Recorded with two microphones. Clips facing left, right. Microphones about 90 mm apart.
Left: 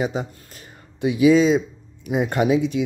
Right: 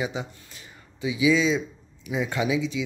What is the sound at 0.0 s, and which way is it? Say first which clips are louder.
Speech: left 5 dB; 45° left (ahead or behind).